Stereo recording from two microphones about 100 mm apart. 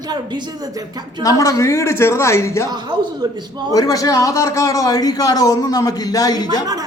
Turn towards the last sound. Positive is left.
turn(degrees=40)  # may be behind; listen again after turning